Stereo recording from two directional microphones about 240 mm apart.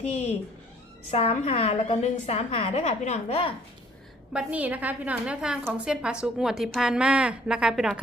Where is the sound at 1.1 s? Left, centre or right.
Left.